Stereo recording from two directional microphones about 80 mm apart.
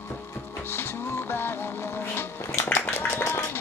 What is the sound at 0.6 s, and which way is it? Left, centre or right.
Music, left.